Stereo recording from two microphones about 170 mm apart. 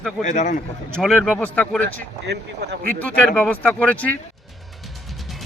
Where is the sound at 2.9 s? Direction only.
10° left (ahead or behind).